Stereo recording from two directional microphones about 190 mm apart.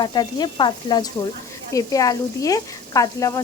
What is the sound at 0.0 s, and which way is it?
Speech, 20° left (ahead or behind).